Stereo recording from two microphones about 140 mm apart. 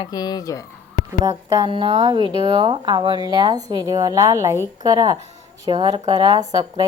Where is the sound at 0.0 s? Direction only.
30° left (ahead or behind).